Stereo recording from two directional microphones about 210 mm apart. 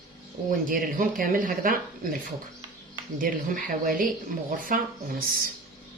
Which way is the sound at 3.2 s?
40° right (ahead or behind).